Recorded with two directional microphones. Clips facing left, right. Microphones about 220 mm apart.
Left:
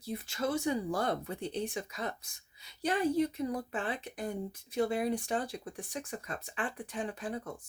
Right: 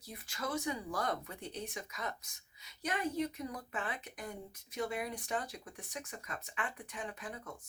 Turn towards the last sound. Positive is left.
turn(degrees=35)  # may be behind; listen again after turning